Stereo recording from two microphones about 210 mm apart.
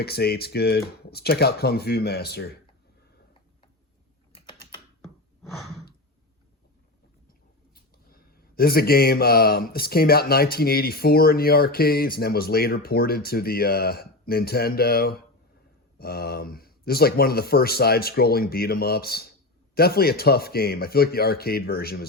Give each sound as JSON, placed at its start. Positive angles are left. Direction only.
{"t": 0.0, "sound": "speech", "side_deg": 50}
{"t": 4.4, "sound": "typing", "side_deg": 20}
{"t": 8.1, "sound": "speech", "side_deg": 45}